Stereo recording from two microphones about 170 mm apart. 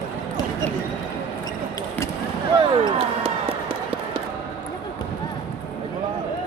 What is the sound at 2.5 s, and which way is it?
Basketball bounce, 30° right (ahead or behind).